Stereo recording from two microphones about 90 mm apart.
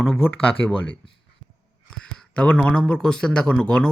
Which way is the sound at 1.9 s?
10° left (ahead or behind).